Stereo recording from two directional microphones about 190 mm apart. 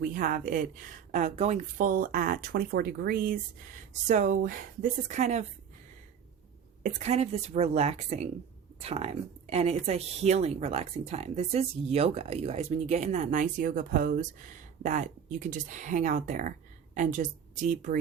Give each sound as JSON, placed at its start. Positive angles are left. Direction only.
{"t": 0.0, "sound": "speech", "side_deg": -45}
{"t": 6.8, "sound": "speech", "side_deg": -35}